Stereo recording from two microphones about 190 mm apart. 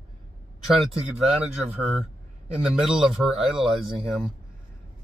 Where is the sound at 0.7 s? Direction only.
Centre (ahead or behind).